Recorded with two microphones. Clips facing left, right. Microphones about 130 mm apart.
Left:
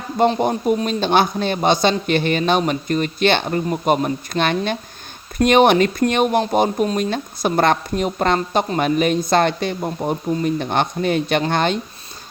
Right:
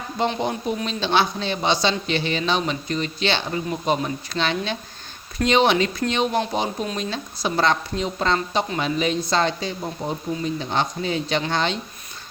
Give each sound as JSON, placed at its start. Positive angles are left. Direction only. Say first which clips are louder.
{"t": 0.2, "sound": "speech", "louder": "left 7 dB", "side_deg": 50}